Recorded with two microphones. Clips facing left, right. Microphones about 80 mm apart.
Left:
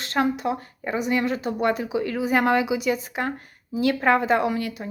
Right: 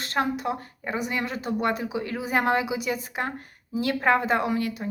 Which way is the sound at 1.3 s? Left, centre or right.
Left.